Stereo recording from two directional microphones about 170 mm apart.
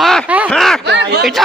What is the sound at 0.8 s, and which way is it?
Speech, 85° right.